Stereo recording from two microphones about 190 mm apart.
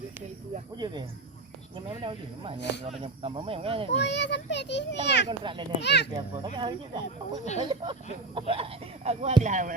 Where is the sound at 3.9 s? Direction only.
65° left (ahead or behind).